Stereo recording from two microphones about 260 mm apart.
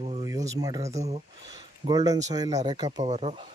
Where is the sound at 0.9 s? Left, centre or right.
Right.